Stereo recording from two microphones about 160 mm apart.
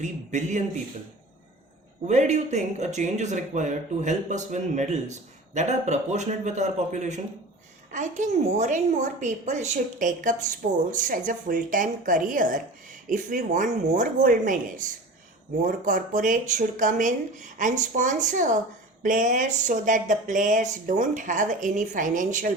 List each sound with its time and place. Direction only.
0.0 s speech: 50° right (ahead or behind)
2.0 s a woman's voice: 45° right (ahead or behind)